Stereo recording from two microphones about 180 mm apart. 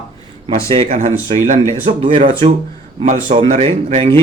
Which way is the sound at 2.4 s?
30° right (ahead or behind).